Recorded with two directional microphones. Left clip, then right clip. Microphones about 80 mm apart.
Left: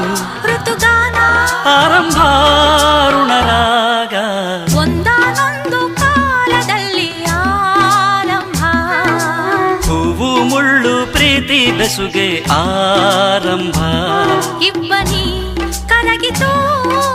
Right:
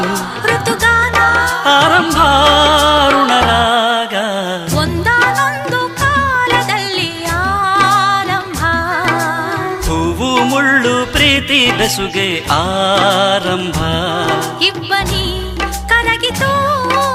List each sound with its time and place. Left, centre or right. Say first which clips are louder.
0.4 s music: even; right
9.5 s music: left 4 dB; right
12.2 s music: left 1 dB; right
15.9 s music: left 1 dB; right